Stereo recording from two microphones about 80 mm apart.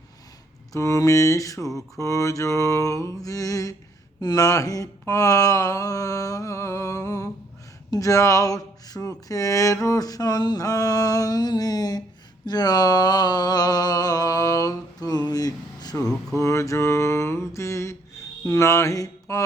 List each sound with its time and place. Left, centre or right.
0.7 s speech: left
12.5 s a sound: left
16.4 s mantra: left